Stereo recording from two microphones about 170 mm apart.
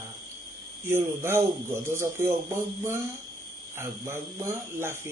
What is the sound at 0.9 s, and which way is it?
Speech, 15° right (ahead or behind).